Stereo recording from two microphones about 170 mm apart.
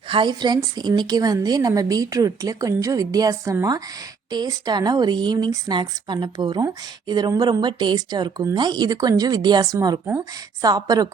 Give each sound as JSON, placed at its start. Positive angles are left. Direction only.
{"t": 0.1, "sound": "speech", "side_deg": -25}